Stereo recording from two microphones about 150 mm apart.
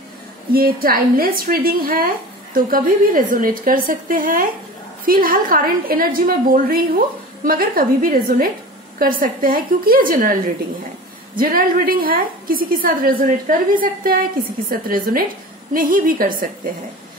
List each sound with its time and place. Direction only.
0.5 s a woman's voice: 80° right